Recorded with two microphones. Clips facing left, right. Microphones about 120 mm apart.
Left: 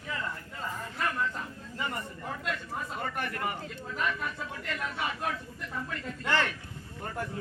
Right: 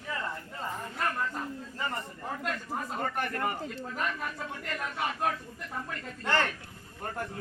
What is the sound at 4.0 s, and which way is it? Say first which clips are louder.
A man's voice: left 2 dB; 40° right (ahead or behind).